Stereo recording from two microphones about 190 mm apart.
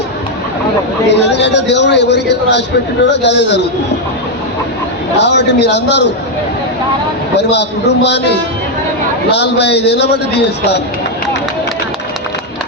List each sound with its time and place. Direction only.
1.1 s a man's voice: 65° left (ahead or behind)
5.1 s a man's voice: 65° left (ahead or behind)
7.3 s a man's voice: 65° left (ahead or behind)